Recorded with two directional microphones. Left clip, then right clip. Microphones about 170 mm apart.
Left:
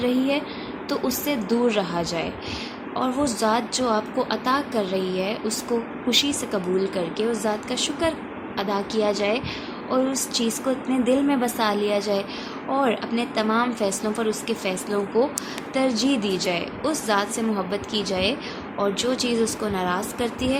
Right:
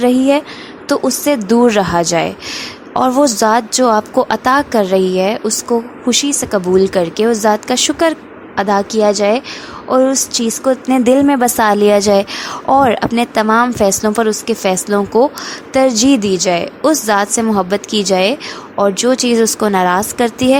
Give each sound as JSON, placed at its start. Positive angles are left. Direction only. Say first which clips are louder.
{"t": 0.0, "sound": "a woman's voice", "louder": "right 11 dB", "side_deg": -50}